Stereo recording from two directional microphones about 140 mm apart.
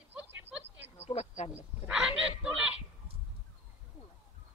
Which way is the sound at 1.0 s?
50° left (ahead or behind).